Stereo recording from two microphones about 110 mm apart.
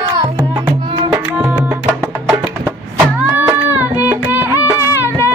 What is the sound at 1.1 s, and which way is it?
Music, 15° right (ahead or behind).